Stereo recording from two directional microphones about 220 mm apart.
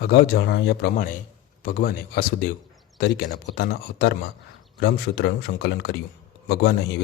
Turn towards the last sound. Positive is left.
turn(degrees=50)  # may be behind; listen again after turning